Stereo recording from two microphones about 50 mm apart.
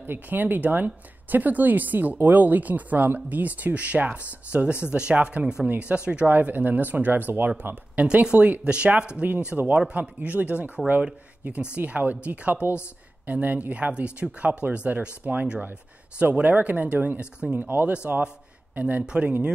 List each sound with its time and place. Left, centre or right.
0.0 s speech: right
6.2 s a man's voice: right; by 9.7 s centre
9.9 s speech: right
17.6 s speech: right
17.9 s speech: right